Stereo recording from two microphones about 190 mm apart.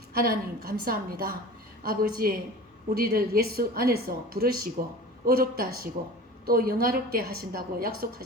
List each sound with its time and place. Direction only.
0.2 s a woman's voice: 50° right (ahead or behind)